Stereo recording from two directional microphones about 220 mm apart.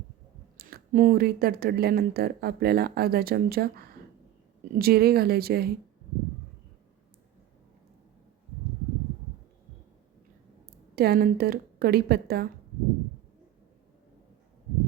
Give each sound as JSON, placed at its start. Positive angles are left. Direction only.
{"t": 0.5, "sound": "speech", "side_deg": -45}
{"t": 10.9, "sound": "speech", "side_deg": -45}